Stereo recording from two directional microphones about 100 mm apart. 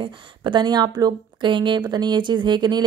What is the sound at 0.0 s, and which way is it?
A woman's voice, 50° right (ahead or behind).